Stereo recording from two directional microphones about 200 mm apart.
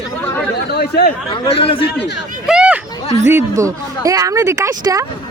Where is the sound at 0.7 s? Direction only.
50° left (ahead or behind).